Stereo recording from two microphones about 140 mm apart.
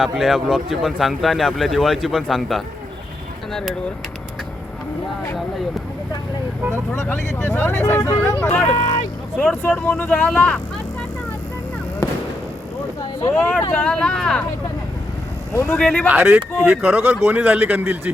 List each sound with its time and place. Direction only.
0.0 s speech: centre (ahead or behind)
7.4 s speech: 15° left (ahead or behind)
9.4 s speech: centre (ahead or behind)
9.7 s speech: 10° left (ahead or behind)
13.3 s speech: 5° left (ahead or behind)
15.5 s speech: 10° left (ahead or behind)
17.0 s a man's voice: 15° right (ahead or behind)